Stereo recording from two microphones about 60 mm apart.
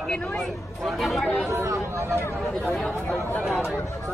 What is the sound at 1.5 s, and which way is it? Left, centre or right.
Speech, right.